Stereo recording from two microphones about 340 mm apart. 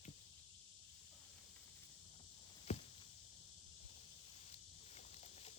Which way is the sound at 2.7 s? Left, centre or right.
Centre.